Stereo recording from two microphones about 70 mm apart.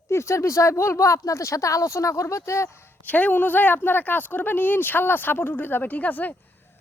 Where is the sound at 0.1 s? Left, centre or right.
Left.